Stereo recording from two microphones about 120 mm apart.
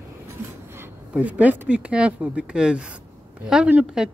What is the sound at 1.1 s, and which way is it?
Speech, 10° right (ahead or behind).